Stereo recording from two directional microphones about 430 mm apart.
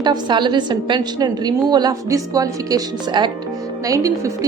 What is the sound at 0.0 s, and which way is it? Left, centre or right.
A woman's voice, centre.